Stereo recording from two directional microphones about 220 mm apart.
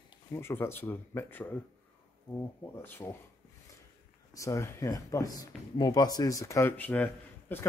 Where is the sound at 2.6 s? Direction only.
10° left (ahead or behind).